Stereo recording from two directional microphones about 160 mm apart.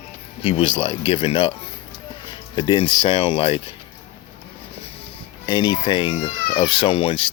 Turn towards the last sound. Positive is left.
turn(degrees=35)  # may be behind; listen again after turning